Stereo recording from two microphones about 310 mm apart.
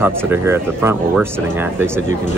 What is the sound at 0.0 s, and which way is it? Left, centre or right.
Speech, centre.